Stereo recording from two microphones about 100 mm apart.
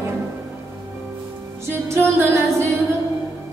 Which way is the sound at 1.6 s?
25° right (ahead or behind).